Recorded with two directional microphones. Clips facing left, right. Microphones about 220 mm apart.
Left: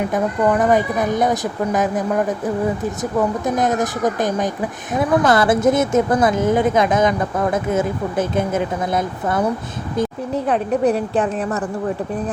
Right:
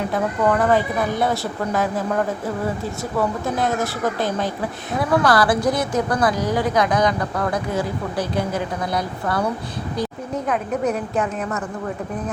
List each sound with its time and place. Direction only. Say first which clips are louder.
0.1 s a woman's voice: left 2 dB; 15° left (ahead or behind)